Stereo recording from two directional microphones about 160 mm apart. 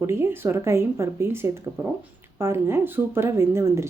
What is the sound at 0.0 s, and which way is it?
Speech, 15° right (ahead or behind).